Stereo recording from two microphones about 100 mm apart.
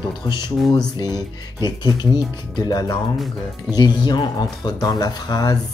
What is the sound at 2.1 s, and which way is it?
Speech, 45° left (ahead or behind).